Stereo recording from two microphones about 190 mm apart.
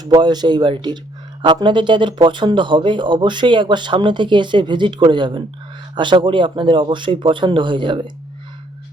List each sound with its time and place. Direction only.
0.0 s speech: 25° right (ahead or behind)